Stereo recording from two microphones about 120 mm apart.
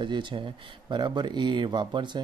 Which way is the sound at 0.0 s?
40° right (ahead or behind).